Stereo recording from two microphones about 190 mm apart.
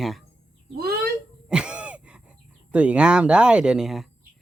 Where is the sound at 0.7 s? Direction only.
55° right (ahead or behind).